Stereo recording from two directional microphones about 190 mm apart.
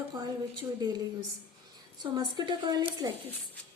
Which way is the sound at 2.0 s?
20° right (ahead or behind).